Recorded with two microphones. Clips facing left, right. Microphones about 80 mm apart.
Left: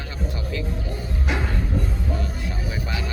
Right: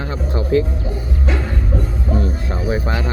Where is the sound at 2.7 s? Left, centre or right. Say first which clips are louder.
Right 11 dB; right.